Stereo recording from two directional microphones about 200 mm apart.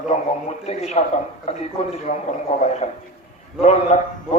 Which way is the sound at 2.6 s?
35° left (ahead or behind).